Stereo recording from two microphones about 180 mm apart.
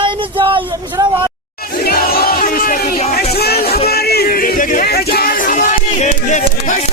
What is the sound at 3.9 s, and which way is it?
Music, 60° left (ahead or behind).